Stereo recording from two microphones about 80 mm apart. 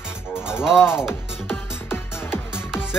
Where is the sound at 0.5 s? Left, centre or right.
Centre.